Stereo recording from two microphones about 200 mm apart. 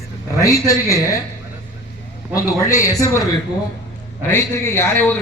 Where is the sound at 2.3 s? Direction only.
15° left (ahead or behind).